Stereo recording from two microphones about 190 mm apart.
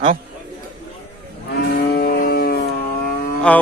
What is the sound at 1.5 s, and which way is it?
Moo, 55° left (ahead or behind).